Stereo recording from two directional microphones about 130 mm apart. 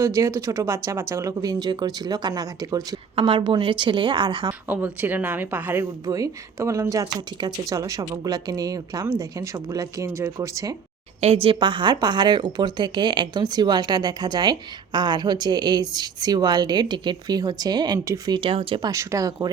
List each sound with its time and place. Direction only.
0.0 s speech: 25° right (ahead or behind)
3.2 s speech: 40° right (ahead or behind)
4.7 s speech: 15° right (ahead or behind)
6.1 s speech: 25° right (ahead or behind)
11.4 s speech: 40° right (ahead or behind)
18.8 s speech: 25° right (ahead or behind)